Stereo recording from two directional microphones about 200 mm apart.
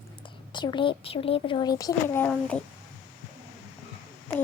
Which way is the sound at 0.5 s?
20° left (ahead or behind).